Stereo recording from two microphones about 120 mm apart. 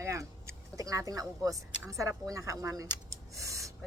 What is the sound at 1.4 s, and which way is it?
Speech, 30° right (ahead or behind).